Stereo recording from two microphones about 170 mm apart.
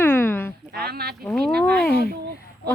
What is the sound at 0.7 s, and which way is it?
Speech, 65° right (ahead or behind).